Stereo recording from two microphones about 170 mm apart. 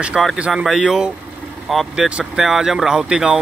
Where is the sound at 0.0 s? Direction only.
Centre (ahead or behind).